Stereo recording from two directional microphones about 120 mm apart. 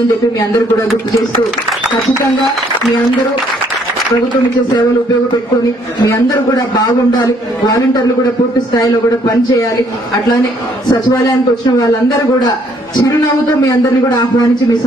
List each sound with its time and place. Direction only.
7.1 s speech: 35° left (ahead or behind)
10.9 s speech: 35° left (ahead or behind)
13.7 s speech: 35° left (ahead or behind)